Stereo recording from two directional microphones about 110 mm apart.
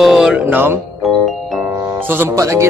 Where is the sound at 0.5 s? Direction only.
15° right (ahead or behind).